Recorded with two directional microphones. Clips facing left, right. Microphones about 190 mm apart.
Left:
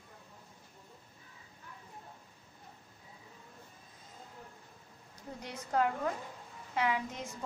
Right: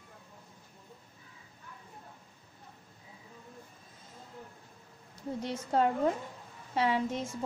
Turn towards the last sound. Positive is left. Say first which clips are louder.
# right 4 dB
turn(degrees=-30)  # may be behind; listen again after turning